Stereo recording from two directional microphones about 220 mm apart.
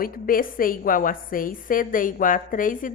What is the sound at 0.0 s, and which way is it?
A woman's voice, 40° left (ahead or behind).